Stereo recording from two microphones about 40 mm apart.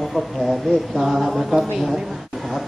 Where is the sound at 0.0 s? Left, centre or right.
Centre.